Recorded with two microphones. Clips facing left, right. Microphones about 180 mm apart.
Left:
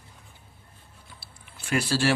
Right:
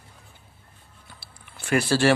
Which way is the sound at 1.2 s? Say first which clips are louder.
Right 3 dB; 60° right (ahead or behind).